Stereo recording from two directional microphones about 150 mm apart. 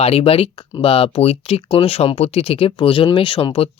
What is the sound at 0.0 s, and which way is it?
Speech, 40° left (ahead or behind).